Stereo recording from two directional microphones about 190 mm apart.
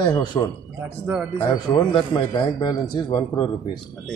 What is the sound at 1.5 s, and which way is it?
Speech, 25° left (ahead or behind).